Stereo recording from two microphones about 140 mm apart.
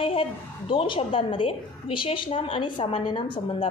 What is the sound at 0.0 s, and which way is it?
A woman's voice, 40° left (ahead or behind).